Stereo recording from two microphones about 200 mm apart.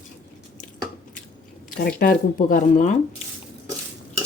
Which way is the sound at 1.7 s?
45° left (ahead or behind).